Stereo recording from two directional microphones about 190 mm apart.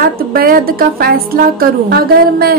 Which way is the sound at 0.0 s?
50° right (ahead or behind).